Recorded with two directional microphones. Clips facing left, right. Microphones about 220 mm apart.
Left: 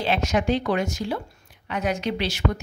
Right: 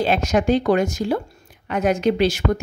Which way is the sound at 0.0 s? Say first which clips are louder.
Right 4 dB; 45° right (ahead or behind).